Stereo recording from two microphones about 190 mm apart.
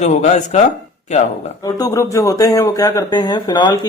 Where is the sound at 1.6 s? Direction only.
20° left (ahead or behind).